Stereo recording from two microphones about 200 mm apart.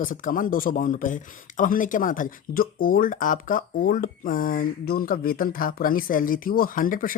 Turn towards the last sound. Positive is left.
turn(degrees=45)  # may be behind; listen again after turning